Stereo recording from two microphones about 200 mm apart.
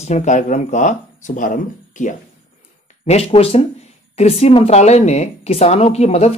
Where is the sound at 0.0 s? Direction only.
35° left (ahead or behind).